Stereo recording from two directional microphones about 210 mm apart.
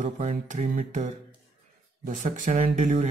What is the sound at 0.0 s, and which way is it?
Mantra, 35° right (ahead or behind).